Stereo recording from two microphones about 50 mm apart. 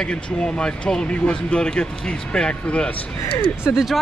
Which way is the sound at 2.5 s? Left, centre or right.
Left.